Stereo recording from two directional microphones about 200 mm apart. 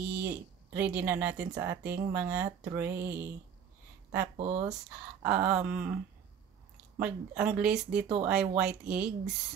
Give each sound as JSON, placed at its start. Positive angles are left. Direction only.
{"t": 0.0, "sound": "speech", "side_deg": -10}
{"t": 4.4, "sound": "speech", "side_deg": -30}
{"t": 5.2, "sound": "speech", "side_deg": -10}
{"t": 7.0, "sound": "speech", "side_deg": -5}